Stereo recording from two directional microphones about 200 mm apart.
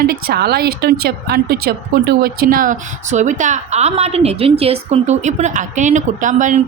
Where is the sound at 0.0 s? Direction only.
50° right (ahead or behind).